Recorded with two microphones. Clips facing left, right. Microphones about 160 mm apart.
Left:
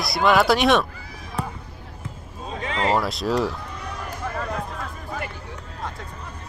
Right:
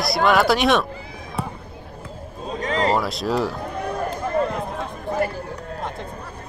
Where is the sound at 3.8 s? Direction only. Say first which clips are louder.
Right 8 dB; 55° right (ahead or behind).